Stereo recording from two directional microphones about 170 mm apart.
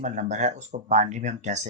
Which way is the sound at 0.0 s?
45° right (ahead or behind).